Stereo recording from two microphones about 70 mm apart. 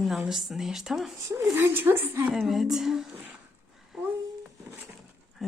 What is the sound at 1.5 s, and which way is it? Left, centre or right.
Speech, right.